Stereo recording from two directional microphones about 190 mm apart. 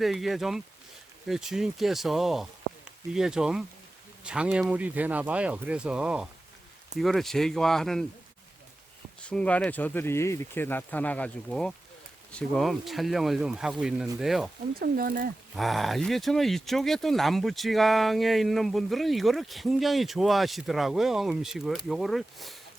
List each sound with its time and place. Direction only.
0.0 s speech: centre (ahead or behind)
9.3 s speech: 5° left (ahead or behind)
14.8 s speech: 50° right (ahead or behind)
15.5 s speech: centre (ahead or behind)